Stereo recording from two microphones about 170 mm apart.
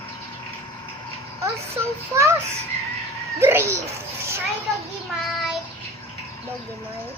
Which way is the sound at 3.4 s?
15° right (ahead or behind).